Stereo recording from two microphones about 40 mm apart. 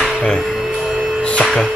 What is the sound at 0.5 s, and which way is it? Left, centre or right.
Music, centre.